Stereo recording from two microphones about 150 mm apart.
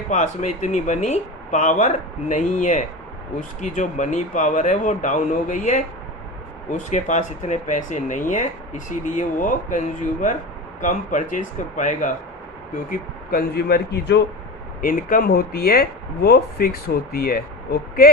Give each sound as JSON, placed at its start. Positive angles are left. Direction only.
{"t": 0.1, "sound": "speech", "side_deg": 55}
{"t": 12.7, "sound": "speech", "side_deg": 70}
{"t": 14.8, "sound": "speech", "side_deg": 65}